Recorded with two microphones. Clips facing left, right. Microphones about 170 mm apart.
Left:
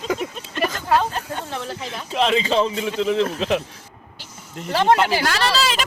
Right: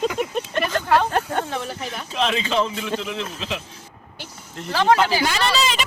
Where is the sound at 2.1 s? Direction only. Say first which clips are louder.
Left 3 dB; 25° left (ahead or behind).